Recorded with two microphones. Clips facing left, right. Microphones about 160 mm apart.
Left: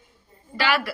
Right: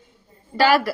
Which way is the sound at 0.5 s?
40° right (ahead or behind).